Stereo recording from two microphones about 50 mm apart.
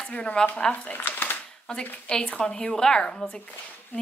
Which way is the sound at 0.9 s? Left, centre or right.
Left.